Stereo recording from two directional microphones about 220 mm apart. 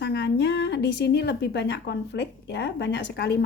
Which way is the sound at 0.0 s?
50° left (ahead or behind).